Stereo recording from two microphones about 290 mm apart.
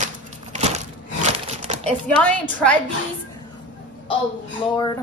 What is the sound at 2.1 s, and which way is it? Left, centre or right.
Speech, centre.